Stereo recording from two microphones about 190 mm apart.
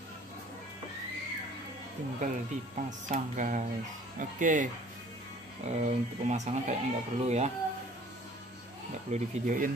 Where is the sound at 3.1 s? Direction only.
40° right (ahead or behind).